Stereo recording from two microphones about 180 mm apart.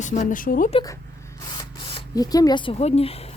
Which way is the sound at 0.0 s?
45° left (ahead or behind).